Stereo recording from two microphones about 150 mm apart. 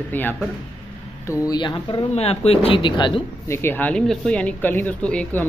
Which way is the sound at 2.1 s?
45° left (ahead or behind).